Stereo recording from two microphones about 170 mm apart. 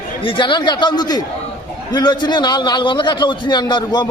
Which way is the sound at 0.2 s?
30° left (ahead or behind).